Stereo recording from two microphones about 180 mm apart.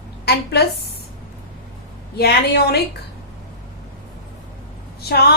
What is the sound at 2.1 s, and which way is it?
Speech, 60° left (ahead or behind).